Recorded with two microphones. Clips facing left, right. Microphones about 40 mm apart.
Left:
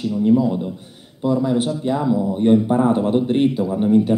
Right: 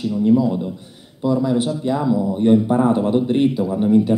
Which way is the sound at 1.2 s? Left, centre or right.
Left.